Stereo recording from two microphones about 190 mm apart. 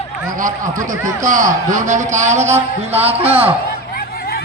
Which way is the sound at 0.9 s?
40° right (ahead or behind).